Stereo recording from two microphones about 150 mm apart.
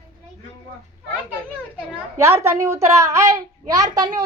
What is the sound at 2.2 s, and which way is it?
A child's voice, 15° right (ahead or behind).